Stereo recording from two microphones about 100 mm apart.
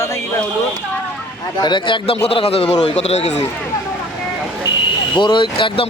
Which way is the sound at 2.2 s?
85° left.